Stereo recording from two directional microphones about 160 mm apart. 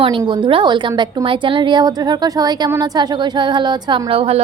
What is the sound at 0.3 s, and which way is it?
A woman's voice, 30° right (ahead or behind).